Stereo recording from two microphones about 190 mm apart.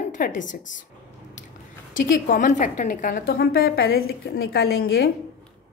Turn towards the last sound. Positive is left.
turn(degrees=60)  # may be behind; listen again after turning